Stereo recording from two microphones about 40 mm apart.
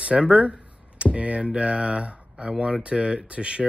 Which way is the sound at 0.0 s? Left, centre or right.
Right.